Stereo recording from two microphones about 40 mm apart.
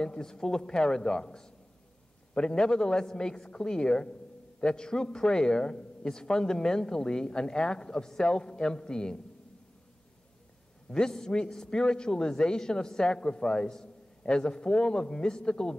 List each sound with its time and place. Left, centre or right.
0.0 s a man's voice: centre
10.9 s a man's voice: centre